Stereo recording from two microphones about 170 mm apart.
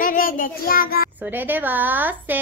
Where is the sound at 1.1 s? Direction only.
10° right (ahead or behind).